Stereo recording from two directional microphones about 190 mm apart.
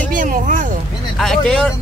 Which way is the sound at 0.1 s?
45° right (ahead or behind).